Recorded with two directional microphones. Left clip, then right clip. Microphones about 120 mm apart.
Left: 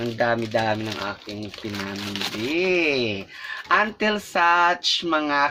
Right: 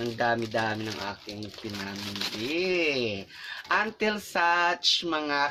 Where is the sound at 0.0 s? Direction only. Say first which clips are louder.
Left 4 dB; 15° right (ahead or behind).